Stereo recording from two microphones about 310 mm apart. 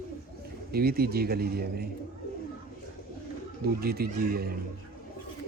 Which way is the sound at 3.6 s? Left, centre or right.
Right.